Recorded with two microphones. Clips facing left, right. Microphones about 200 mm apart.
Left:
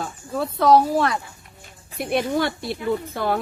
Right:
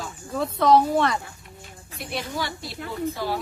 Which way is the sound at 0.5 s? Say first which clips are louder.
Left 2 dB; 5° left (ahead or behind).